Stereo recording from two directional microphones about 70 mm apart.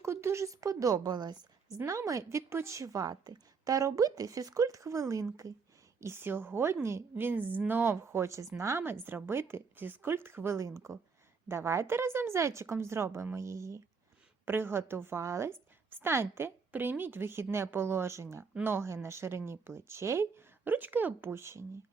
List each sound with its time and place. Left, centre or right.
0.0 s a woman's voice: right
1.8 s a woman's voice: right
6.0 s speech: right
10.6 s a woman's voice: right
14.4 s speech: right
15.4 s speech: right